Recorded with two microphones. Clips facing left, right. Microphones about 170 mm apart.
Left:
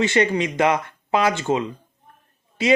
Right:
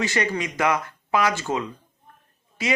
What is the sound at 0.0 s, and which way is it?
Speech, 25° left (ahead or behind).